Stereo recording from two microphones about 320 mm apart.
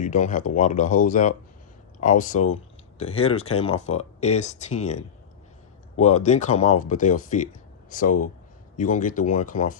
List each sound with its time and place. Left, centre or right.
0.0 s speech: left